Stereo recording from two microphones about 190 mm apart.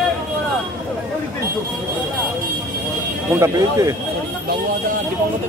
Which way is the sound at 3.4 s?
15° right (ahead or behind).